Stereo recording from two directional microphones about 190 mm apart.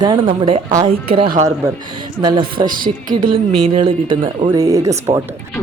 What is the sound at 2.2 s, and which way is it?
Speech, 25° right (ahead or behind).